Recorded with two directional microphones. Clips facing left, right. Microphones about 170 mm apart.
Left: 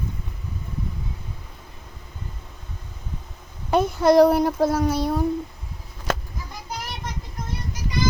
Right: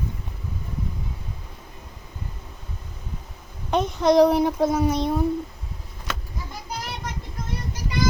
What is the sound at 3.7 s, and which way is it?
A child's voice, 5° left (ahead or behind).